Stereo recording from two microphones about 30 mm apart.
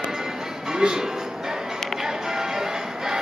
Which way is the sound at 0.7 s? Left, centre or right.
Right.